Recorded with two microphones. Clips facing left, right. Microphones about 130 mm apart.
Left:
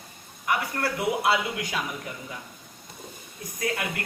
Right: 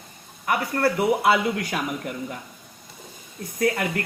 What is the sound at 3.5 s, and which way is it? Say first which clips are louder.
Speech: right 7 dB; 55° right (ahead or behind).